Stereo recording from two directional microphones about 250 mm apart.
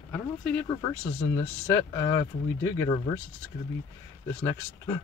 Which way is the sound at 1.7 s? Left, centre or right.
Centre.